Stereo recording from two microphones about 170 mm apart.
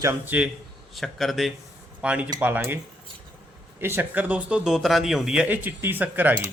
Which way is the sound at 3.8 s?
15° right (ahead or behind).